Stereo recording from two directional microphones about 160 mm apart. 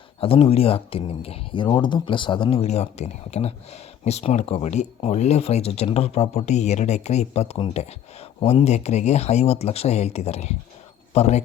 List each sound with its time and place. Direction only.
0.2 s speech: 35° left (ahead or behind)